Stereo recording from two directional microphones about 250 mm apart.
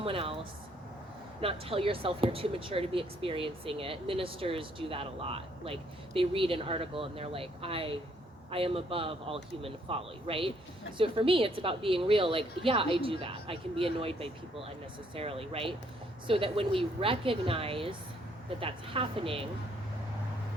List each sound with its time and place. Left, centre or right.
0.0 s speech: right
1.4 s speech: right